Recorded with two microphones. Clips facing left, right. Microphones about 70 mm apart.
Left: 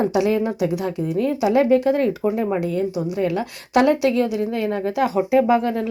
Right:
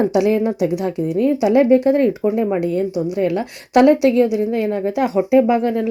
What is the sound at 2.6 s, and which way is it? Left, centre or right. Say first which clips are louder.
A woman's voice: right 3 dB; right.